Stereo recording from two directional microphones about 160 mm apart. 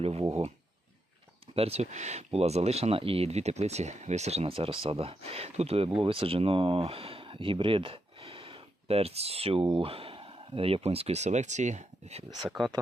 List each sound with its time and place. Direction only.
0.0 s a sound: 40° right (ahead or behind)
1.5 s speech: 40° right (ahead or behind)
12.5 s speech: centre (ahead or behind)